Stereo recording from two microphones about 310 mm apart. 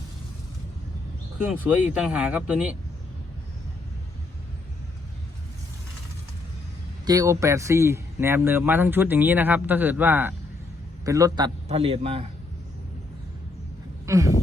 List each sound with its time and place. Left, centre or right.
1.7 s speech: centre
7.0 s a man's voice: centre
14.1 s a man's voice: centre